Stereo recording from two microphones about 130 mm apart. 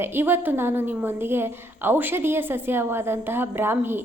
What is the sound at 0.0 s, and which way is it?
A woman's voice, 15° right (ahead or behind).